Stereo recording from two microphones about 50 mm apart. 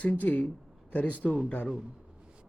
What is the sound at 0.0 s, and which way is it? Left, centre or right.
Speech, left.